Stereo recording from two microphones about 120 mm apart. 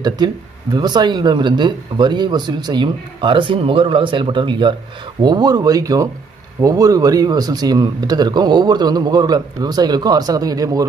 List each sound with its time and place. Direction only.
0.2 s speech: 35° right (ahead or behind)